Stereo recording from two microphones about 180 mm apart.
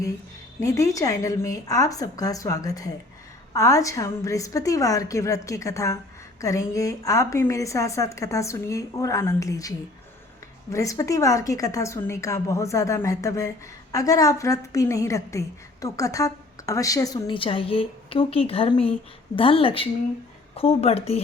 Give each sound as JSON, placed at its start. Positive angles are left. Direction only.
{"t": 0.6, "sound": "a woman's voice", "side_deg": 15}